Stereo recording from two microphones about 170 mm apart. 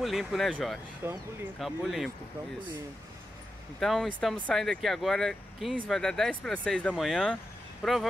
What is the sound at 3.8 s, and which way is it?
Speech, centre (ahead or behind).